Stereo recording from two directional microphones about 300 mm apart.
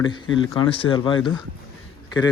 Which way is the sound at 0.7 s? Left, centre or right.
Centre.